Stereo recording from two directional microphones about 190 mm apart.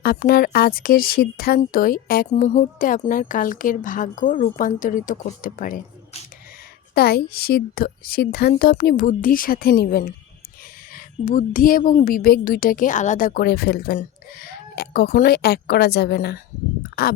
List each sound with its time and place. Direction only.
0.0 s speech: 50° left (ahead or behind)
2.3 s a woman's voice: 40° left (ahead or behind); by 17.2 s 55° left (ahead or behind)